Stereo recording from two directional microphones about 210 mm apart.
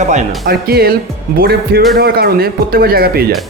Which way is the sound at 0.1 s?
40° right (ahead or behind).